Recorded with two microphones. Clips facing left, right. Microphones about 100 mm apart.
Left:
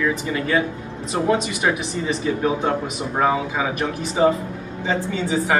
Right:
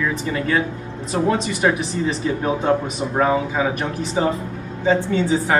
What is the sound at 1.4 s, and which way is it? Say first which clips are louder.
Speech: right 3 dB; 35° right (ahead or behind).